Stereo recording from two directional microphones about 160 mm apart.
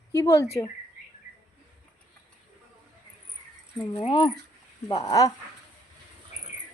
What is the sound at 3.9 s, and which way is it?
Speech, 30° left (ahead or behind).